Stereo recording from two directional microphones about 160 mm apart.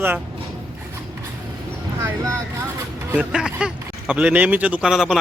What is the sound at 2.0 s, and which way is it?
Speech, 15° right (ahead or behind).